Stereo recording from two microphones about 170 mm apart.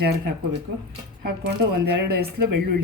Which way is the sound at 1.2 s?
70° right (ahead or behind).